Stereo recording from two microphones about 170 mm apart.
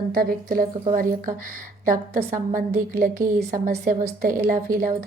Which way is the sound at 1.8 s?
50° right (ahead or behind).